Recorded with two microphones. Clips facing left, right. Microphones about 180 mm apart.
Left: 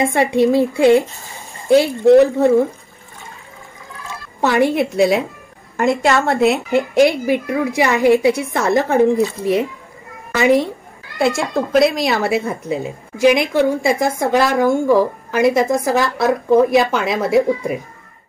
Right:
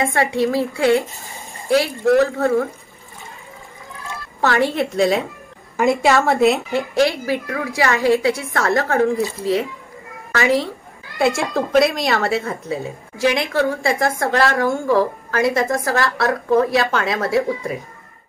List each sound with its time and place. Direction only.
0.1 s a woman's voice: 20° left (ahead or behind)
4.4 s a woman's voice: 15° left (ahead or behind)
4.8 s speech: centre (ahead or behind)
6.7 s a woman's voice: 20° left (ahead or behind)
11.1 s speech: centre (ahead or behind)
12.3 s a woman's voice: 15° left (ahead or behind)